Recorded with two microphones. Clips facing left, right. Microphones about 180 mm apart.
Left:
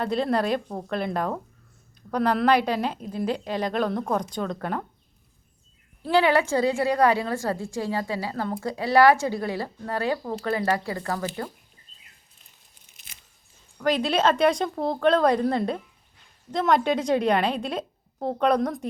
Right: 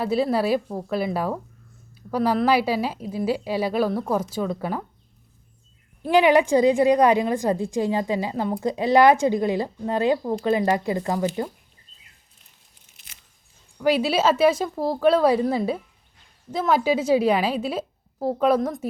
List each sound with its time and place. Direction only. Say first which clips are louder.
0.0 s a woman's voice: right 2 dB; 5° right (ahead or behind)
6.0 s a woman's voice: right 4 dB; 15° right (ahead or behind)
13.7 s a woman's voice: right 3 dB; 10° right (ahead or behind)